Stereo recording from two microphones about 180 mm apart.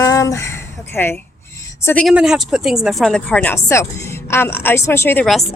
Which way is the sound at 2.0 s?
5° right (ahead or behind).